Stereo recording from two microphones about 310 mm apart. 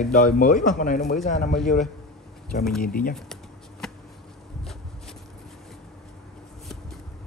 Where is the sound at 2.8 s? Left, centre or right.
Left.